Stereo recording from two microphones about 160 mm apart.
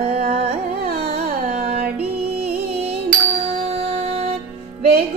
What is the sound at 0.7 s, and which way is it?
Carnatic music, 70° right (ahead or behind).